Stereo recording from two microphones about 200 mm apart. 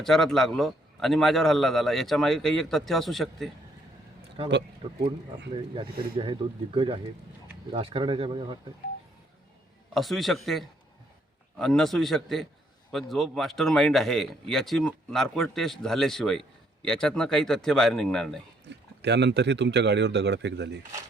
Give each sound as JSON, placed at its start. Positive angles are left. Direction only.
{"t": 0.0, "sound": "speech", "side_deg": 0}
{"t": 4.8, "sound": "speech", "side_deg": -25}
{"t": 9.9, "sound": "speech", "side_deg": 0}
{"t": 18.7, "sound": "speech", "side_deg": -60}